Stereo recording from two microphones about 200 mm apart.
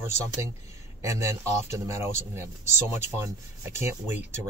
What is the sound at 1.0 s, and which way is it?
Speech, 15° right (ahead or behind).